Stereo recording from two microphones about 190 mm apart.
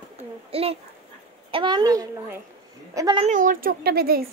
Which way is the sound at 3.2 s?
45° right (ahead or behind).